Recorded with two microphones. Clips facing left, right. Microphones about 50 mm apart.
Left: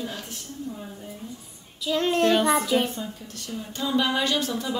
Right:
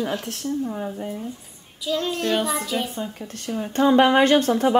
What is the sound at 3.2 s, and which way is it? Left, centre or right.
Speech, right.